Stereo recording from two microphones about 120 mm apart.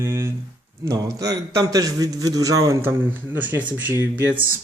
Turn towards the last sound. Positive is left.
turn(degrees=-15)  # may be behind; listen again after turning